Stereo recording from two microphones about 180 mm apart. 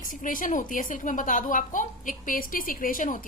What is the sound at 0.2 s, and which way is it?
A woman's voice, 50° left (ahead or behind).